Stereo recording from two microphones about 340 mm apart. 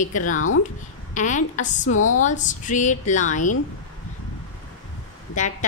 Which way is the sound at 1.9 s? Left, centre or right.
Left.